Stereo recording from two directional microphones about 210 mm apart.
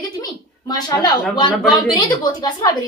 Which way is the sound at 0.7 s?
20° left (ahead or behind).